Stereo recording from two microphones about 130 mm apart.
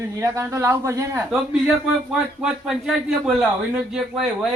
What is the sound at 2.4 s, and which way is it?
Speech, centre (ahead or behind).